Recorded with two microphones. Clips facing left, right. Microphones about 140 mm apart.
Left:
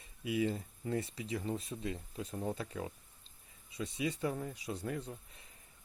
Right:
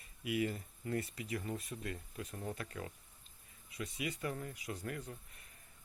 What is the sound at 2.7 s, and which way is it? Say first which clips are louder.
Speech: left 4 dB; 15° left (ahead or behind).